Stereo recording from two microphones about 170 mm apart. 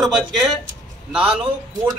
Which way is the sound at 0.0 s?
Centre (ahead or behind).